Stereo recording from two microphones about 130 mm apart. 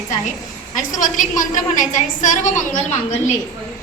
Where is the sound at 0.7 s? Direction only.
85° left.